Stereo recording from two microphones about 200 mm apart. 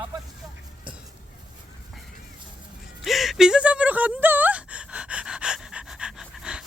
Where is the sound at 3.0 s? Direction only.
Centre (ahead or behind).